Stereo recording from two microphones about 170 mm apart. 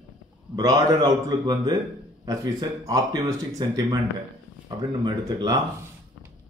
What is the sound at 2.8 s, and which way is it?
Speech, 20° right (ahead or behind).